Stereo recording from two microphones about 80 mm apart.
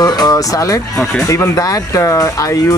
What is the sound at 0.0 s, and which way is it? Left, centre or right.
Speech, left.